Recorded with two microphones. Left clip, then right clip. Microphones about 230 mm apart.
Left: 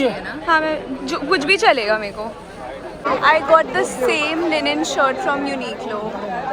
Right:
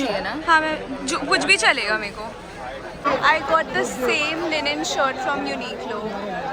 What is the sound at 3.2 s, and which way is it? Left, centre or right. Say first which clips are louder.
Speech: left 6 dB; centre.